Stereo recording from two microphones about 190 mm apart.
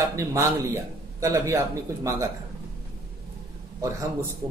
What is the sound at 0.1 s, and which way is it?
A man's voice, 15° right (ahead or behind).